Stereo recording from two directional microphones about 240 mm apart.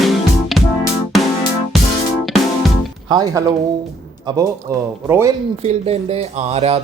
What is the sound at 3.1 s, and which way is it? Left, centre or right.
Speech, centre.